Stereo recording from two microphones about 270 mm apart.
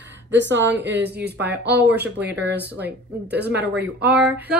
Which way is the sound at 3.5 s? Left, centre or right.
Right.